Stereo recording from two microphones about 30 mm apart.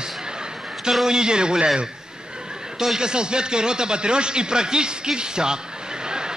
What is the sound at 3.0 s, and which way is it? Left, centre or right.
A man's voice, right.